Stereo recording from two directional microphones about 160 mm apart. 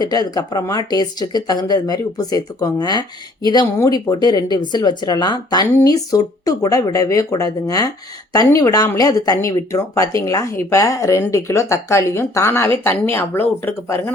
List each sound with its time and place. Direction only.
0.0 s speech: 25° left (ahead or behind)